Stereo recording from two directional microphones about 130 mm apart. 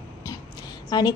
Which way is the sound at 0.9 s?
35° left (ahead or behind).